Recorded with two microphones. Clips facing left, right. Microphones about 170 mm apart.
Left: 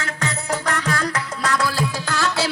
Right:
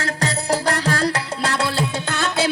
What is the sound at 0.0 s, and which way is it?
Music, 35° right (ahead or behind).